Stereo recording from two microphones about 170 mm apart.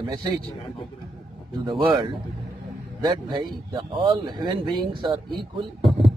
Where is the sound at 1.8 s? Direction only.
25° right (ahead or behind).